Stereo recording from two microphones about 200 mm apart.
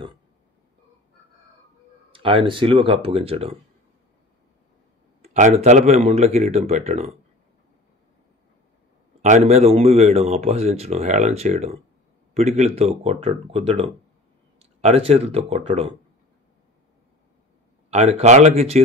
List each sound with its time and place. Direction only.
2.1 s speech: 25° right (ahead or behind)
5.2 s speech: 35° right (ahead or behind)
9.2 s speech: 35° right (ahead or behind)
17.8 s speech: 30° right (ahead or behind)